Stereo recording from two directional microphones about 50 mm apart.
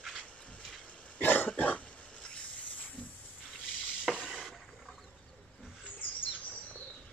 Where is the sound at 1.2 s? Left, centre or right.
Left.